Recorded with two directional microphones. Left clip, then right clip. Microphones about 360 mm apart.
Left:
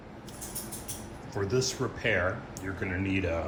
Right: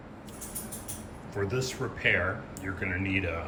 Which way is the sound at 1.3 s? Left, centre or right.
Centre.